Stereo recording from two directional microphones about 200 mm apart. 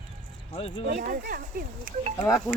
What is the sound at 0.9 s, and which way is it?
Speech, 50° right (ahead or behind).